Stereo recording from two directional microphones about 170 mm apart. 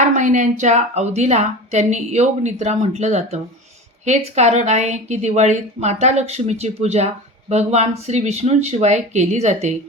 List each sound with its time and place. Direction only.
0.0 s a woman's voice: 45° right (ahead or behind)